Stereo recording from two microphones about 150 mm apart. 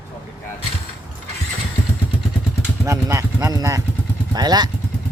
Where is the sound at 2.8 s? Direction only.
20° right (ahead or behind).